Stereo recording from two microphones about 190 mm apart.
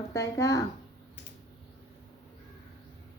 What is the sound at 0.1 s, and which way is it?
Speech, 15° left (ahead or behind).